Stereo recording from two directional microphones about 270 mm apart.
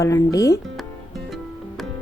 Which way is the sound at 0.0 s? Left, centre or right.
Centre.